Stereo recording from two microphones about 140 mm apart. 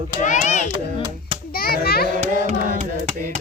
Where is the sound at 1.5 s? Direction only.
90° left.